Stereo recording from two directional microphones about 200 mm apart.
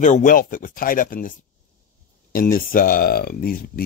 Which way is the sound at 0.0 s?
40° left (ahead or behind).